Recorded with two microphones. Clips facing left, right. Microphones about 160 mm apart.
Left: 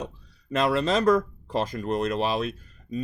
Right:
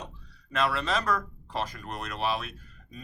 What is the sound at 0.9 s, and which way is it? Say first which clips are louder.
Speech: left 8 dB; 30° left (ahead or behind).